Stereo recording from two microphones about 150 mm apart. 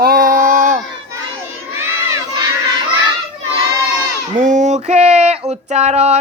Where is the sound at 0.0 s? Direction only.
75° right (ahead or behind).